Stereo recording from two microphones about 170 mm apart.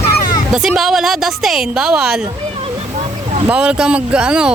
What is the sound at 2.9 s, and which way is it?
Vehicle, 40° right (ahead or behind).